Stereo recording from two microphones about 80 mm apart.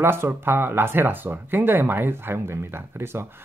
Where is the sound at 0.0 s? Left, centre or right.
Right.